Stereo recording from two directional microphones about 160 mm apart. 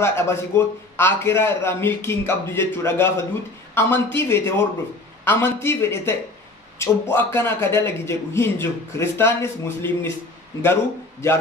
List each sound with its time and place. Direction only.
0.0 s a man's voice: 15° left (ahead or behind)